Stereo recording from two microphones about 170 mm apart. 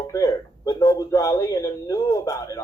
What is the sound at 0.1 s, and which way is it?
A man's voice, 20° left (ahead or behind).